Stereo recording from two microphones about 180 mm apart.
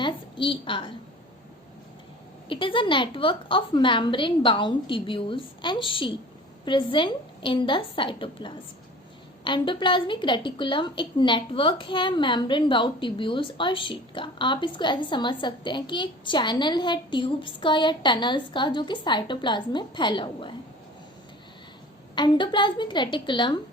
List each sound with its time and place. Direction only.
0.0 s a sound: 30° left (ahead or behind)
2.5 s a woman's voice: 30° left (ahead or behind)
22.1 s a woman's voice: 25° left (ahead or behind)